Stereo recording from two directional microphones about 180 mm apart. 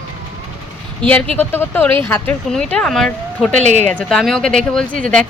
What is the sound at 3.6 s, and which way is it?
Speech, 40° right (ahead or behind).